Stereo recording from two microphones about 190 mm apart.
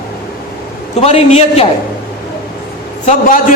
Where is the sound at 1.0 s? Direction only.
35° left (ahead or behind).